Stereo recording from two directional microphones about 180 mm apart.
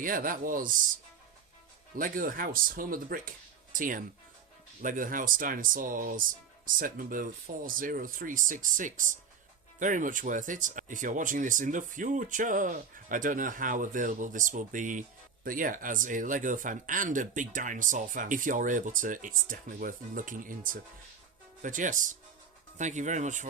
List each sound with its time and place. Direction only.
0.0 s speech: 50° right (ahead or behind)
2.0 s speech: 50° right (ahead or behind)